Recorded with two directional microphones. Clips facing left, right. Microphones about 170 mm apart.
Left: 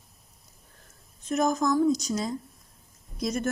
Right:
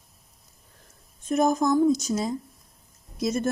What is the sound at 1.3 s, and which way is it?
Speech, 30° right (ahead or behind).